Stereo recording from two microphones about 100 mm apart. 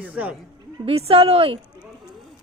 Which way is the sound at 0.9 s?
70° right (ahead or behind).